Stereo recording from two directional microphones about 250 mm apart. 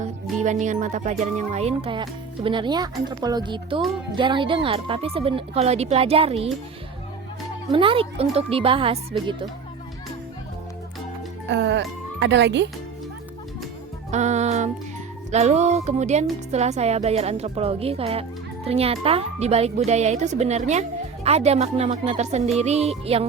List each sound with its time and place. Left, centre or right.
0.0 s speech: right
7.7 s speech: right
11.4 s speech: right
14.1 s speech: right